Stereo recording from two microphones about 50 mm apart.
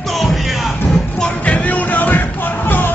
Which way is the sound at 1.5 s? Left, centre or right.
Left.